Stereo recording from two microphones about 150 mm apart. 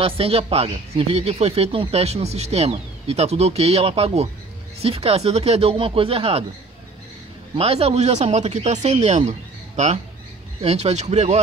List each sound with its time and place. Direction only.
0.0 s speech: 40° right (ahead or behind)
7.5 s speech: 40° right (ahead or behind)